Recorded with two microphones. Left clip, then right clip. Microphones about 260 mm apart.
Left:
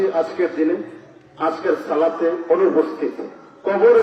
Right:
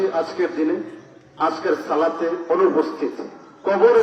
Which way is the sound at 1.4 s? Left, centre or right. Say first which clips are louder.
Left 1 dB; right.